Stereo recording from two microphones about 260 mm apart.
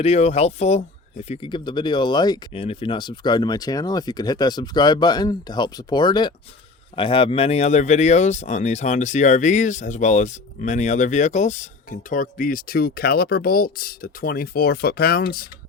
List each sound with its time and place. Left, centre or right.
0.0 s speech: left